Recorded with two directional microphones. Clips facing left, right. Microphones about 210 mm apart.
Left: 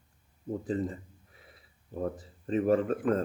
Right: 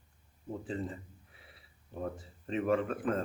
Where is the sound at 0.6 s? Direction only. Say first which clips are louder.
Left 6 dB; 40° left (ahead or behind).